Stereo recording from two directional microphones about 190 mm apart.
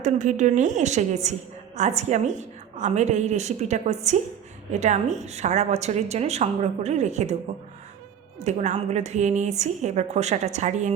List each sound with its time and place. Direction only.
0.0 s a woman's voice: 40° right (ahead or behind)
8.4 s a woman's voice: 35° right (ahead or behind)